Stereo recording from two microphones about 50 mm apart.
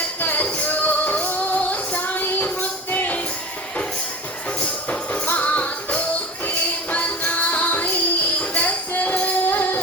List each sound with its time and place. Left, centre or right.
0.2 s music: left
4.6 s music: left